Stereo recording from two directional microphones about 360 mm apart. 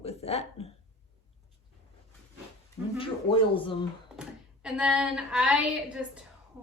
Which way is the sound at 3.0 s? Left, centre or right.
Centre.